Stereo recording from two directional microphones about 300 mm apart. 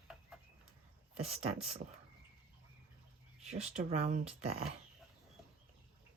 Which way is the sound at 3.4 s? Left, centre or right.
Right.